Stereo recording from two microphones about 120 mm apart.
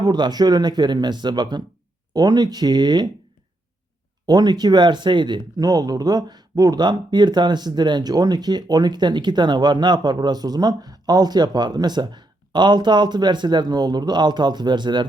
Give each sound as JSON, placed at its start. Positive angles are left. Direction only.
{"t": 0.0, "sound": "speech", "side_deg": -35}
{"t": 4.3, "sound": "speech", "side_deg": -35}